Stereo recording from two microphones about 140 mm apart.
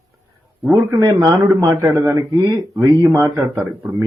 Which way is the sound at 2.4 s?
25° right (ahead or behind).